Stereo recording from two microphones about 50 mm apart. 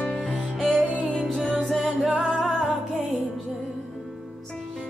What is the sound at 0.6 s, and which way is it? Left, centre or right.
Music, centre.